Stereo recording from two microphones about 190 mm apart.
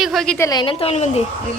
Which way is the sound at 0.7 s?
35° left (ahead or behind).